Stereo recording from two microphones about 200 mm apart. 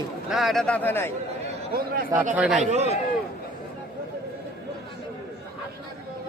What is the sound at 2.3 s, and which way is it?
Speech, 5° right (ahead or behind).